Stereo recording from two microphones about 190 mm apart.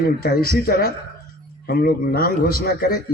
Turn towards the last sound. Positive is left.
turn(degrees=50)  # may be behind; listen again after turning